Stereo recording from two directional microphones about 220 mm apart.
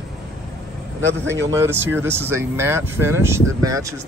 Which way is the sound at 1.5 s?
10° right (ahead or behind).